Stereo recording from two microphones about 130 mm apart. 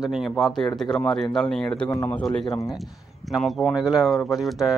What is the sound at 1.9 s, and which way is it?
Speech, 25° left (ahead or behind).